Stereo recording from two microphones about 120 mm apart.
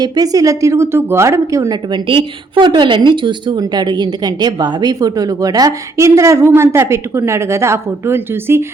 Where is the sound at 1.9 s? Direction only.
45° right (ahead or behind).